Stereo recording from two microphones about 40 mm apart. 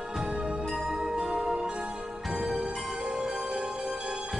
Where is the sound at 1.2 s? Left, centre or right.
Centre.